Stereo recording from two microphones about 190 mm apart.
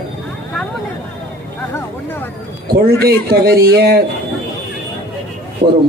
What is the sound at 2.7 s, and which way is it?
A man's voice, 55° right (ahead or behind).